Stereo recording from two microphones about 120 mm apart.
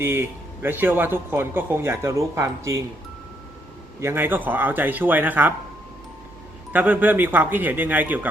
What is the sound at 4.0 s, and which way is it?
Speech, 20° right (ahead or behind).